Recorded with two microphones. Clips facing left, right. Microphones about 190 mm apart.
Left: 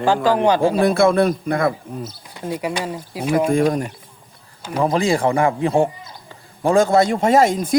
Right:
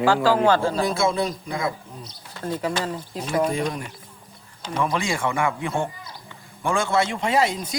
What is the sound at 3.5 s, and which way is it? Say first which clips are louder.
Speech: left 9 dB; 45° left (ahead or behind).